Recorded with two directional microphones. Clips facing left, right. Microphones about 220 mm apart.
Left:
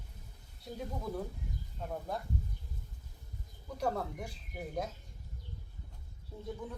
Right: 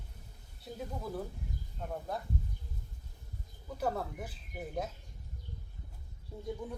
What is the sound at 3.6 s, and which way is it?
Speech, 5° right (ahead or behind).